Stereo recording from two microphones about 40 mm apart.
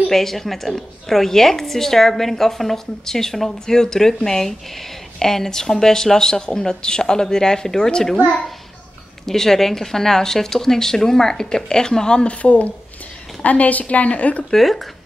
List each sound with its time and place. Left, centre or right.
0.1 s a woman's voice: centre
9.2 s a woman's voice: centre
12.4 s a woman's voice: left
14.5 s speech: centre